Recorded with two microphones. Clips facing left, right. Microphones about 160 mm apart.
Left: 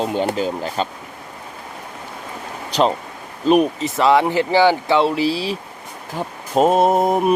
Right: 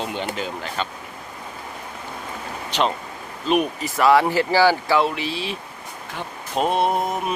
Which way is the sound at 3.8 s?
25° left (ahead or behind).